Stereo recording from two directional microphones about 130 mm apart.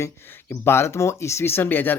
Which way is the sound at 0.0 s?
15° left (ahead or behind).